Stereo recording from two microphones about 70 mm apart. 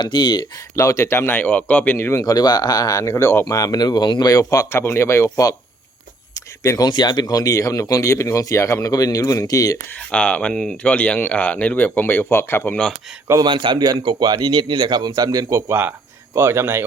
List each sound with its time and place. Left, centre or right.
0.0 s speech: left
0.8 s speech: left
1.4 s speech: left
2.2 s speech: left
3.5 s speech: left
4.8 s speech: left
6.3 s a sound: left
6.8 s speech: left
10.1 s speech: centre; by 12.7 s left
13.4 s a man's voice: right
16.3 s speech: right